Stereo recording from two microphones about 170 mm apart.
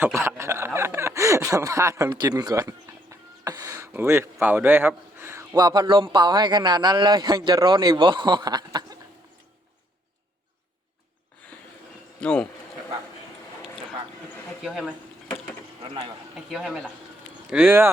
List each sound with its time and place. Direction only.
0.0 s speech: 15° right (ahead or behind)
12.2 s speech: 5° left (ahead or behind)
14.6 s speech: 5° right (ahead or behind)
15.8 s speech: 30° right (ahead or behind)
16.5 s speech: centre (ahead or behind)
17.5 s speech: 10° right (ahead or behind)